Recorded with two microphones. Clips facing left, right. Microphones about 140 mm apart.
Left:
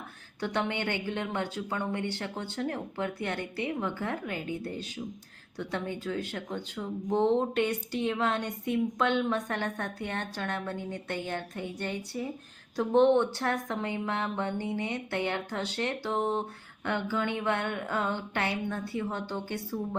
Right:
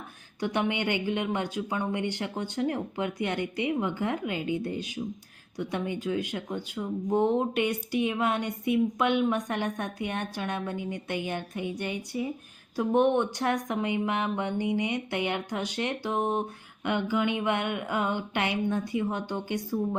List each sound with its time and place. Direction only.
0.3 s speech: 15° right (ahead or behind)